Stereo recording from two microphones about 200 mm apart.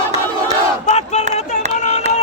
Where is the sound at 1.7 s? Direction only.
35° left (ahead or behind).